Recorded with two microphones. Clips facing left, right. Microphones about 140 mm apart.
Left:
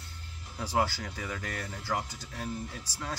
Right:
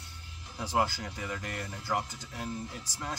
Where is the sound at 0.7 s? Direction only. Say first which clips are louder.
Even; 20° right (ahead or behind).